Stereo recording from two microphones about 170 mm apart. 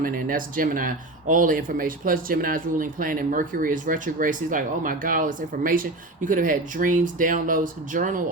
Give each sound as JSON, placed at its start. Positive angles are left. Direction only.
{"t": 0.0, "sound": "speech", "side_deg": -55}